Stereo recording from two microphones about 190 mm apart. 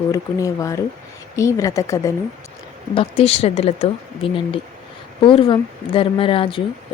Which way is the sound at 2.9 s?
30° left (ahead or behind).